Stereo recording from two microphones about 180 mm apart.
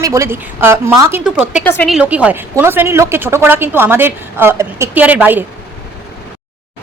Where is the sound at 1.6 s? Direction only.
10° left (ahead or behind).